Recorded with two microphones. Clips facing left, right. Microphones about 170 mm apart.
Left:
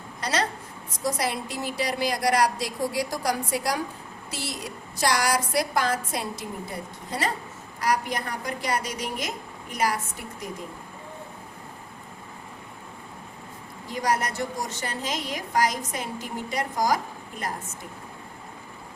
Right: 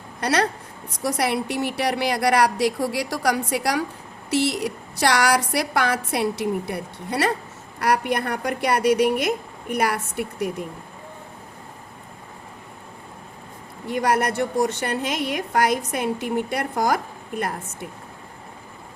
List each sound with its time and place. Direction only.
0.2 s a woman's voice: 65° right (ahead or behind)
13.8 s a woman's voice: 60° right (ahead or behind)